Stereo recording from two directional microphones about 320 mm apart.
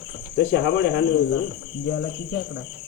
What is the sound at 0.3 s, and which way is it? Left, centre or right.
Speech, left.